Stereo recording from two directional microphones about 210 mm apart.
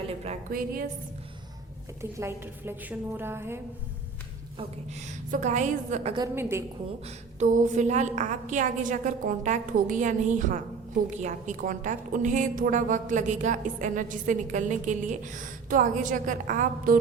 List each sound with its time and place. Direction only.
0.3 s a woman's voice: 45° right (ahead or behind)
2.0 s a woman's voice: 10° right (ahead or behind)
4.5 s a woman's voice: 35° right (ahead or behind)
6.1 s a woman's voice: 15° right (ahead or behind)
7.3 s a woman's voice: 35° right (ahead or behind)